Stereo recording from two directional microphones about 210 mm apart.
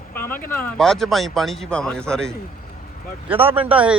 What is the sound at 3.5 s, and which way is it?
Speech, 5° right (ahead or behind).